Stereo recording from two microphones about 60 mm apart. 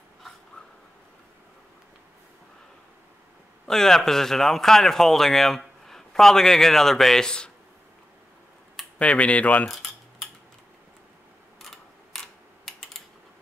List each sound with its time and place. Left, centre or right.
3.6 s speech: centre
8.9 s speech: left
9.7 s keys jangling: centre
11.6 s a sound: centre